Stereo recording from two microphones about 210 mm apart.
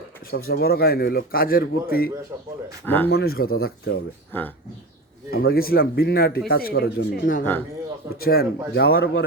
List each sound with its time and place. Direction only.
0.3 s a man's voice: 45° left (ahead or behind)
2.8 s speech: 10° left (ahead or behind)
3.1 s a man's voice: 45° left (ahead or behind)
4.3 s speech: 10° left (ahead or behind)
5.3 s a man's voice: 45° left (ahead or behind)